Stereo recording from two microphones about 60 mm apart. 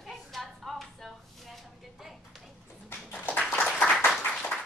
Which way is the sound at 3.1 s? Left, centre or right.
Left.